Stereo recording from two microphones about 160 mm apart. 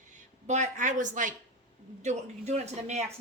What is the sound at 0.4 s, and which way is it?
Speech, 50° right (ahead or behind).